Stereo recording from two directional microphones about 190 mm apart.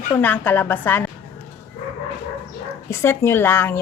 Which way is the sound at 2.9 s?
15° left (ahead or behind).